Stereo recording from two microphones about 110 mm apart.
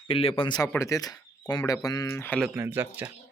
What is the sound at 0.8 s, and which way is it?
Speech, 30° left (ahead or behind).